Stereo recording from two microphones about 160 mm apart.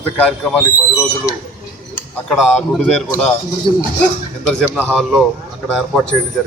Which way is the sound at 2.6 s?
5° left (ahead or behind).